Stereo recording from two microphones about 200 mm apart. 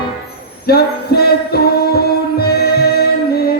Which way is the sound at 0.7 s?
50° left (ahead or behind).